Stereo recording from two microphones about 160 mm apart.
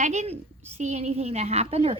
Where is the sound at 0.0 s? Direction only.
45° right (ahead or behind).